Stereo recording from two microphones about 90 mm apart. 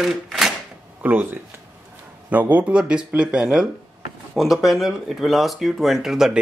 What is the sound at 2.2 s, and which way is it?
A man's voice, 15° right (ahead or behind).